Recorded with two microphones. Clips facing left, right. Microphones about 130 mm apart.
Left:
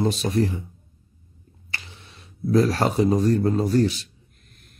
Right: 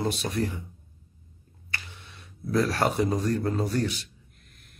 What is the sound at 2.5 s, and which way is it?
Speech, 25° left (ahead or behind).